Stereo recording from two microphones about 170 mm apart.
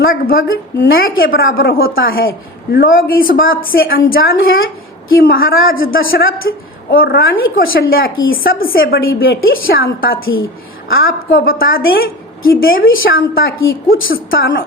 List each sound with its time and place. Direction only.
0.0 s a woman's voice: 60° left (ahead or behind)
6.5 s a woman's voice: 85° left
6.9 s a woman's voice: 60° left (ahead or behind)